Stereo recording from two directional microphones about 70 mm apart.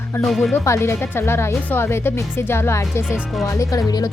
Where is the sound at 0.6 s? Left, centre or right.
Left.